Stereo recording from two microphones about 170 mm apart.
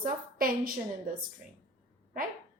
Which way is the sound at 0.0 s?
60° right (ahead or behind).